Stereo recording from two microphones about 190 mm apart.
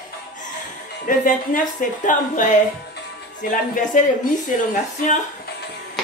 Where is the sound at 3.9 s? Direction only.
45° left (ahead or behind).